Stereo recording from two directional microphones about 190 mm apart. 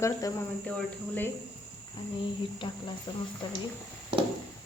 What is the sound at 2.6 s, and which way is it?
Speech, 25° left (ahead or behind).